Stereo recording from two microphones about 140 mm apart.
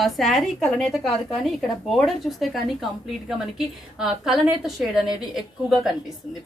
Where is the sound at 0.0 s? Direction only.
Centre (ahead or behind).